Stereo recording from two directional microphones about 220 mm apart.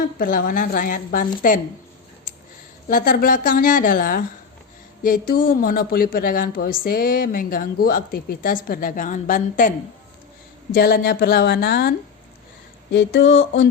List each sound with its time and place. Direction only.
0.2 s speech: 40° left (ahead or behind)
2.9 s speech: 40° left (ahead or behind)
10.8 s a woman's voice: 45° left (ahead or behind)
12.9 s a sound: 55° left (ahead or behind)